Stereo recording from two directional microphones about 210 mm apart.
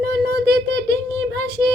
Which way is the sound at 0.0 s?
55° right (ahead or behind).